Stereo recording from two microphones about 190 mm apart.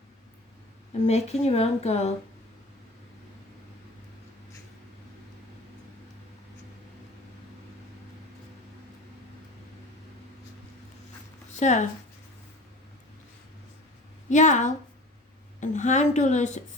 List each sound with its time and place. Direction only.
1.0 s speech: 35° left (ahead or behind)
11.5 s speech: 40° left (ahead or behind)
14.3 s speech: 40° left (ahead or behind)